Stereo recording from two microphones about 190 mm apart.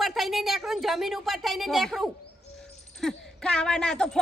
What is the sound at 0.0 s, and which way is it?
Speech, centre (ahead or behind).